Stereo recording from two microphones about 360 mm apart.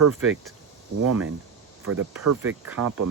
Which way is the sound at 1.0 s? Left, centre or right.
Right.